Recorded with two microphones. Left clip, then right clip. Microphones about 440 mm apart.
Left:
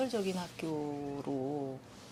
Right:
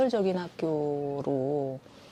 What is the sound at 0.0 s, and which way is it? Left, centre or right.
Speech, right.